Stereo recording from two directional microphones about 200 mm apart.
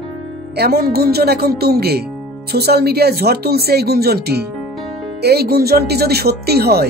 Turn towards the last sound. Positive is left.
turn(degrees=-50)  # may be behind; listen again after turning